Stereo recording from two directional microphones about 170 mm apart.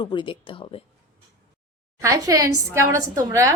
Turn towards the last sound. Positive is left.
turn(degrees=-20)  # may be behind; listen again after turning